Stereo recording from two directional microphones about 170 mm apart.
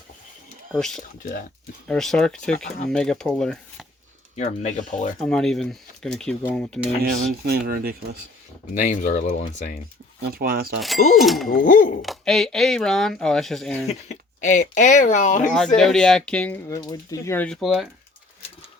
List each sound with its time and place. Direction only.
0.7 s speech: 5° left (ahead or behind)
4.4 s speech: 45° left (ahead or behind)
5.2 s speech: 5° left (ahead or behind)
7.0 s speech: 50° right (ahead or behind)
7.7 s speech: 60° right (ahead or behind)
8.7 s speech: 50° left (ahead or behind)
10.2 s speech: 60° right (ahead or behind)
10.8 s speech: centre (ahead or behind)
11.6 s speech: 50° left (ahead or behind)
12.0 s speech: centre (ahead or behind)
13.8 s speech: 40° left (ahead or behind)
15.5 s speech: 5° left (ahead or behind)
16.6 s speech: 20° left (ahead or behind); by 17.7 s 5° left (ahead or behind)